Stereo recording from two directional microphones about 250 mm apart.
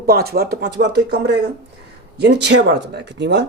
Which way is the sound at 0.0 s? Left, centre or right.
Right.